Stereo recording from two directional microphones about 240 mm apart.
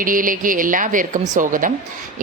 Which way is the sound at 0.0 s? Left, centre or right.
Right.